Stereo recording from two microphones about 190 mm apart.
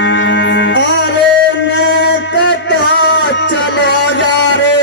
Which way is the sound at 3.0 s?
70° left (ahead or behind).